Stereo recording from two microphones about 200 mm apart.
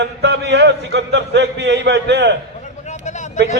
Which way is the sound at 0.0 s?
60° right (ahead or behind).